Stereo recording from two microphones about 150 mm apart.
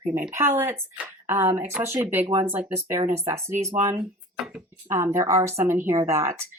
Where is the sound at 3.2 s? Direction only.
20° right (ahead or behind).